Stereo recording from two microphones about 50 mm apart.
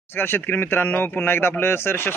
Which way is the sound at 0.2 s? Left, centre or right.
Left.